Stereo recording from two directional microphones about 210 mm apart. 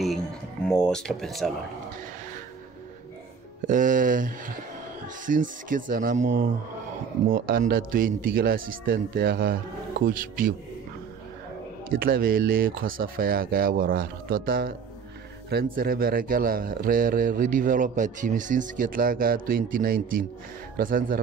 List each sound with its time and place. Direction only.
0.7 s speech: 5° left (ahead or behind)
3.6 s speech: 40° right (ahead or behind)
7.3 s a man's voice: 45° right (ahead or behind)
11.9 s a man's voice: 45° right (ahead or behind)